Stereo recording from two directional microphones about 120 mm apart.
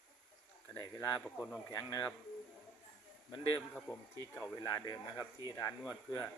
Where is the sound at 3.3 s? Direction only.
40° left (ahead or behind).